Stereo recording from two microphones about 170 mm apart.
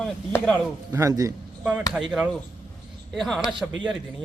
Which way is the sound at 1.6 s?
5° right (ahead or behind).